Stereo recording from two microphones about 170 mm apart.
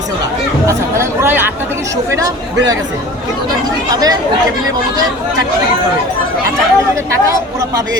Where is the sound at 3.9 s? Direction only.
20° right (ahead or behind).